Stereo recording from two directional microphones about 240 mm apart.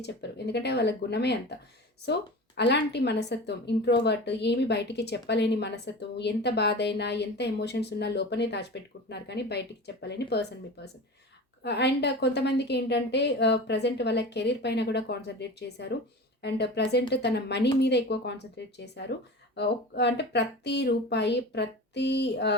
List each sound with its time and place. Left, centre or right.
0.0 s a woman's voice: left
2.6 s a woman's voice: left
11.6 s a woman's voice: left